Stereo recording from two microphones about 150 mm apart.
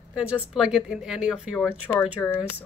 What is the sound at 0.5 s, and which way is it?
Speech, 5° right (ahead or behind).